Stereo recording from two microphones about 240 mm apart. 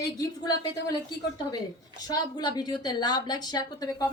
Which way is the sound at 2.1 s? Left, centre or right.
Centre.